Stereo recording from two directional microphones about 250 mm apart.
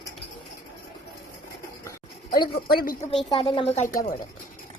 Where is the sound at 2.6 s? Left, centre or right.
Left.